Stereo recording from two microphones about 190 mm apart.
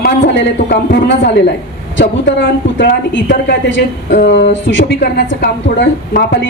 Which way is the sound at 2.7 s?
70° left (ahead or behind).